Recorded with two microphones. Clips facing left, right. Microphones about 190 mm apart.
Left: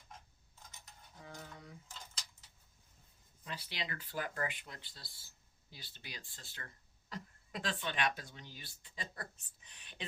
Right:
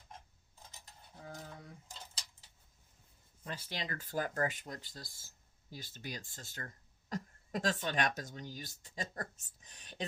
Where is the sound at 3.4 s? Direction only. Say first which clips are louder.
Right 2 dB; 45° right (ahead or behind).